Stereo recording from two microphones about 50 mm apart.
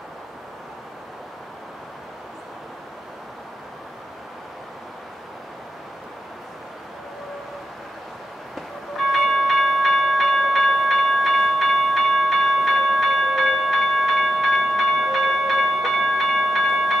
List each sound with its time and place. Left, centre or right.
8.5 s train: centre